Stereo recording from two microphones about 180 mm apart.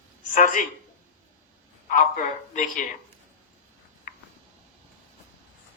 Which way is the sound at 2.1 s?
45° left (ahead or behind).